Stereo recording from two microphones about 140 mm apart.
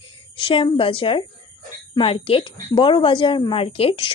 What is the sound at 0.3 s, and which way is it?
Speech, 40° left (ahead or behind).